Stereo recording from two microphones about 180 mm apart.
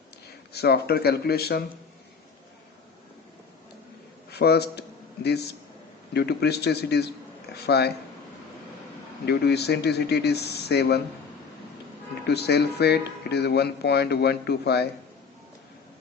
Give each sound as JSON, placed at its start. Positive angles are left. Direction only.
{"t": 0.5, "sound": "speech", "side_deg": 60}
{"t": 4.3, "sound": "a sound", "side_deg": 65}
{"t": 6.1, "sound": "speech", "side_deg": 65}
{"t": 9.2, "sound": "speech", "side_deg": 65}
{"t": 12.3, "sound": "speech", "side_deg": 65}